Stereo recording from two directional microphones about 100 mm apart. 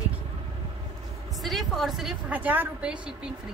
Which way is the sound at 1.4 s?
Centre (ahead or behind).